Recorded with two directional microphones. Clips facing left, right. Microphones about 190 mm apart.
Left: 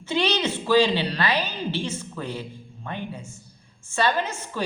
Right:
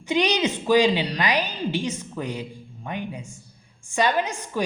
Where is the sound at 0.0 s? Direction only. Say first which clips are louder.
Right 2 dB; 15° right (ahead or behind).